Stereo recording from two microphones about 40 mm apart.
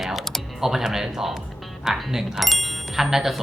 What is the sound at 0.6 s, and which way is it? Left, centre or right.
Speech, centre.